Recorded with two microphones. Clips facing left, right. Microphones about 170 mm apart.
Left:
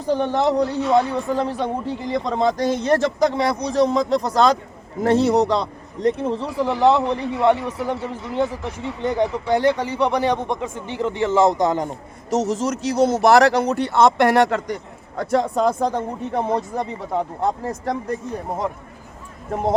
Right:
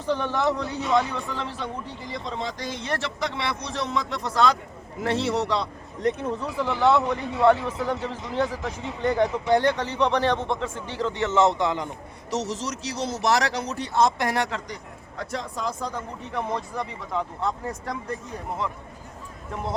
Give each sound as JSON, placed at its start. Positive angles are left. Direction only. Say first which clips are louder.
{"t": 0.0, "sound": "a man's voice", "louder": "left 5 dB", "side_deg": 40}
{"t": 6.0, "sound": "a man's voice", "louder": "left 5 dB", "side_deg": 30}
{"t": 7.0, "sound": "speech", "louder": "left 2 dB", "side_deg": 20}
{"t": 11.4, "sound": "a man's voice", "louder": "left 5 dB", "side_deg": 40}
{"t": 16.4, "sound": "a man's voice", "louder": "left 6 dB", "side_deg": 45}
{"t": 19.5, "sound": "speech", "louder": "left 9 dB", "side_deg": 50}